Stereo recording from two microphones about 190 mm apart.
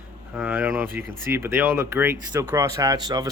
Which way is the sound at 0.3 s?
10° right (ahead or behind).